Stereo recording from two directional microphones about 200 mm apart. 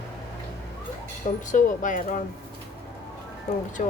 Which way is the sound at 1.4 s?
40° left (ahead or behind).